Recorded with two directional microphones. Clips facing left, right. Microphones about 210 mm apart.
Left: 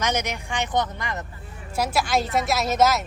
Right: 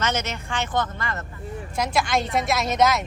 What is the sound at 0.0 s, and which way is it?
Speech, 15° left (ahead or behind).